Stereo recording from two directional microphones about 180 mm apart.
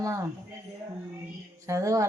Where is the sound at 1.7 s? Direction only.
15° right (ahead or behind).